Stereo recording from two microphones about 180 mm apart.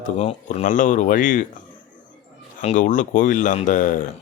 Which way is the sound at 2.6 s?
45° left (ahead or behind).